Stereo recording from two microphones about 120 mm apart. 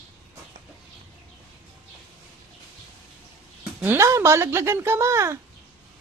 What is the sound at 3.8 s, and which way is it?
Speech, 20° right (ahead or behind).